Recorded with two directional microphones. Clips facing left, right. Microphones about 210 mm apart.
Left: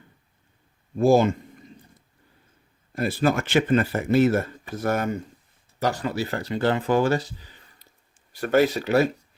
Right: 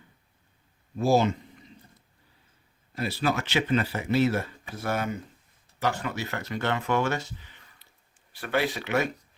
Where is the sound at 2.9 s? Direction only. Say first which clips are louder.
Left 5 dB; 50° left (ahead or behind).